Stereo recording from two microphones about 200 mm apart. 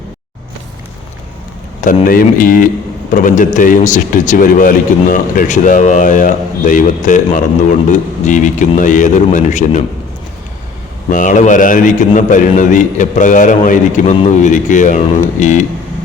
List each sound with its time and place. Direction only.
1.8 s a man's voice: 40° left (ahead or behind)
11.1 s a man's voice: 40° left (ahead or behind)